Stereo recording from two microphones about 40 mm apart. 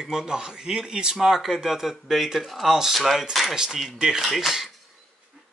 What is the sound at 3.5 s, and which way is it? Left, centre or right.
Speech, centre.